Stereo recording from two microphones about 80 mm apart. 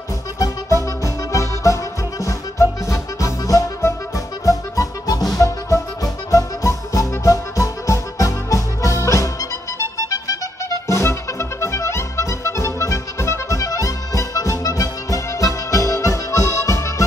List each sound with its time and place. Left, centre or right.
1.0 s music: left
3.8 s accordion: left
5.4 s music: left